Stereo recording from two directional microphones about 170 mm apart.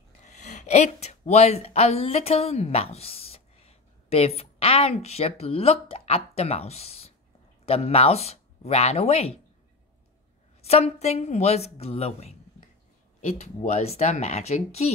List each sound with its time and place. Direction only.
0.3 s speech: 45° left (ahead or behind)
10.6 s speech: 40° left (ahead or behind)